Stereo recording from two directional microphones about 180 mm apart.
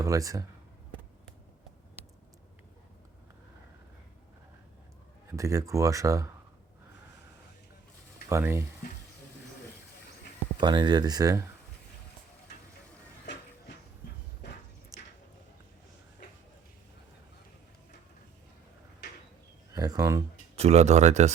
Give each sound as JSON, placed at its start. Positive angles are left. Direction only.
{"t": 0.0, "sound": "speech", "side_deg": -20}
{"t": 5.4, "sound": "speech", "side_deg": -15}
{"t": 8.3, "sound": "speech", "side_deg": -15}
{"t": 10.6, "sound": "speech", "side_deg": -25}
{"t": 19.7, "sound": "speech", "side_deg": -20}
{"t": 20.6, "sound": "speech", "side_deg": -35}